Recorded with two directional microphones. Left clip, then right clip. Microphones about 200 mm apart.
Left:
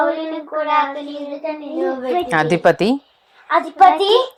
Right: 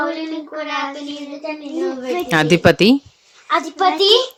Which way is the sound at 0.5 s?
20° right (ahead or behind).